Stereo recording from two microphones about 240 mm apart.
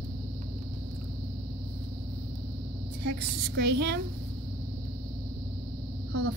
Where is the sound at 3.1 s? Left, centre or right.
Right.